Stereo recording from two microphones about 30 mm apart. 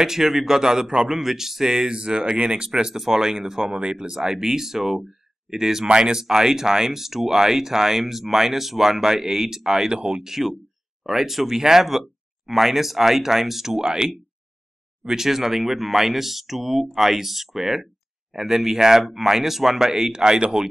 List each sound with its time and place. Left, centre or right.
0.0 s speech: centre
1.9 s speech: right
3.7 s speech: right; by 5.9 s centre
5.9 s speech: right
6.1 s speech: centre
9.9 s speech: right
10.2 s speech: centre
13.7 s speech: right
15.0 s speech: centre